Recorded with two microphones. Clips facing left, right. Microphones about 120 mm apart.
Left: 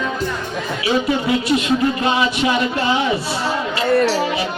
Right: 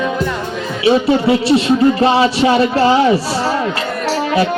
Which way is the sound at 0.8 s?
30° right (ahead or behind).